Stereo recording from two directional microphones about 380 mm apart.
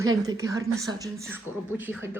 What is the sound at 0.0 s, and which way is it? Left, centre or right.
Speech, centre.